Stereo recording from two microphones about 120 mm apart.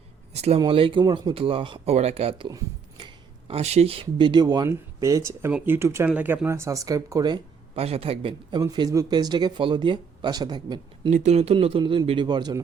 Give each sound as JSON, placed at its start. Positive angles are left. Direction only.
{"t": 0.3, "sound": "speech", "side_deg": -60}
{"t": 0.6, "sound": "speech", "side_deg": -45}
{"t": 1.3, "sound": "a man's voice", "side_deg": -50}
{"t": 1.9, "sound": "speech", "side_deg": -60}
{"t": 3.5, "sound": "speech", "side_deg": -60}
{"t": 7.8, "sound": "a man's voice", "side_deg": -55}
{"t": 8.6, "sound": "speech", "side_deg": -35}
{"t": 11.1, "sound": "speech", "side_deg": -70}
{"t": 11.5, "sound": "a man's voice", "side_deg": -45}